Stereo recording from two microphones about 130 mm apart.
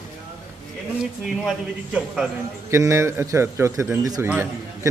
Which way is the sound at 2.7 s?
20° right (ahead or behind).